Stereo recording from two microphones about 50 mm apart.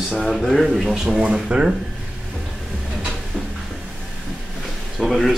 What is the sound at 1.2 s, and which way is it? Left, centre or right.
Speech, right.